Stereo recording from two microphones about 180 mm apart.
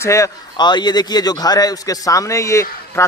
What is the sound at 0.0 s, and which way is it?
A man's voice, 15° left (ahead or behind).